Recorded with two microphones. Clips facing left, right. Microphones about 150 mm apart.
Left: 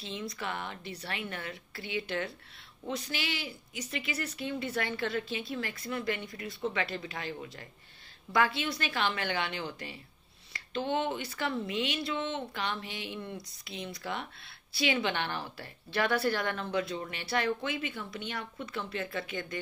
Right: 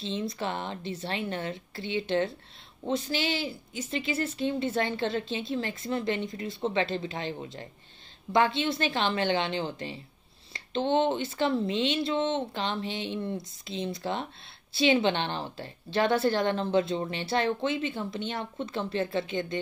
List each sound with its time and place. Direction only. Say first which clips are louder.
0.0 s a woman's voice: right 6 dB; 25° right (ahead or behind)